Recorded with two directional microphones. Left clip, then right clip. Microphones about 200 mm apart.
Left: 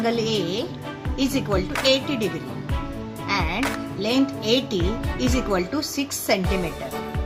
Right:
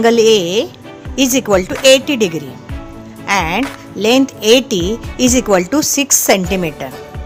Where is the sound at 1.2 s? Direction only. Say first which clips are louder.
Right 11 dB; 50° right (ahead or behind).